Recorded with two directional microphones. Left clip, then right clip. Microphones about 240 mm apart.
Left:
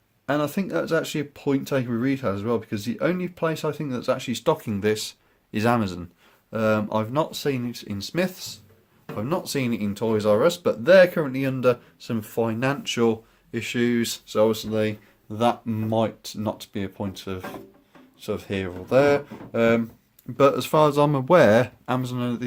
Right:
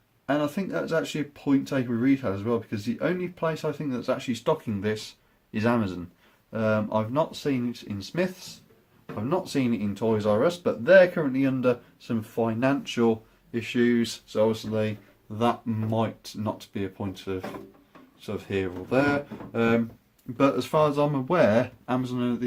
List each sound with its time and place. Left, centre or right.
0.3 s speech: left